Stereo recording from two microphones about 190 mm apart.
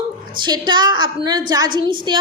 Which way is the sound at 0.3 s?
25° right (ahead or behind).